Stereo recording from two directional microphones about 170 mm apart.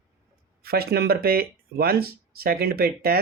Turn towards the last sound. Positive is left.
turn(degrees=-65)  # may be behind; listen again after turning